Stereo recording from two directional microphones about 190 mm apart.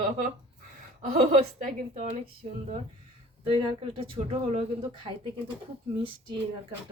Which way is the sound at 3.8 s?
30° right (ahead or behind).